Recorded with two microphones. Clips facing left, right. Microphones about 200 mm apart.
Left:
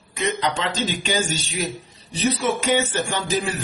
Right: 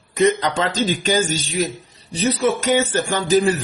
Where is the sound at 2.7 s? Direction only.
45° right (ahead or behind).